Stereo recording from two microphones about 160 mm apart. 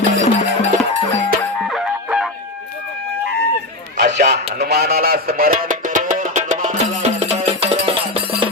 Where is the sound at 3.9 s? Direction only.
90° right; by 6.7 s 50° right (ahead or behind).